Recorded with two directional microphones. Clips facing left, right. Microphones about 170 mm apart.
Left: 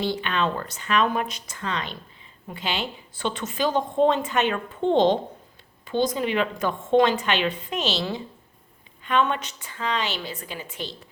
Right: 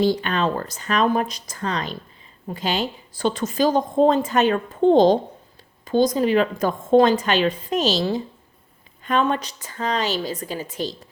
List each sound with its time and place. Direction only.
0.0 s a woman's voice: 40° right (ahead or behind)